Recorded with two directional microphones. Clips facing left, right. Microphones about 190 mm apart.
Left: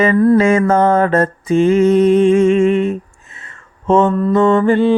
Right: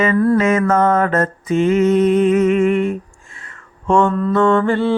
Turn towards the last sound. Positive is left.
turn(degrees=15)  # may be behind; listen again after turning